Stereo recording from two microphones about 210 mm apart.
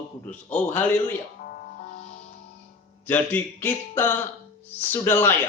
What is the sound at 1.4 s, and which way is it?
Music, 40° left (ahead or behind).